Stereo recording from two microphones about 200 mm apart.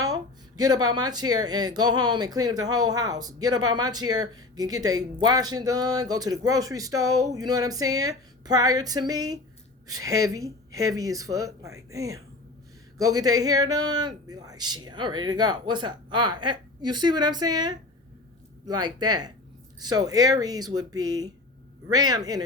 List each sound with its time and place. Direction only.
0.0 s a man's voice: 20° right (ahead or behind)